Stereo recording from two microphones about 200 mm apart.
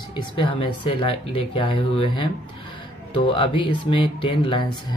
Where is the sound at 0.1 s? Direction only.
25° left (ahead or behind).